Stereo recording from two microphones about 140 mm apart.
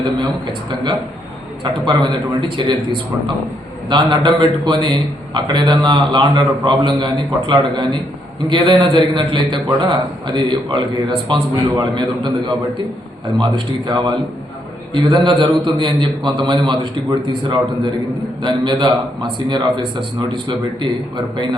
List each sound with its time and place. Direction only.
1.9 s a man's voice: 30° right (ahead or behind)
3.8 s a man's voice: 35° right (ahead or behind)